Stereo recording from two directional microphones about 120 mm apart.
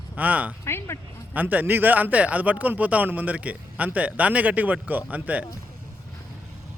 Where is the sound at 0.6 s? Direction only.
20° left (ahead or behind).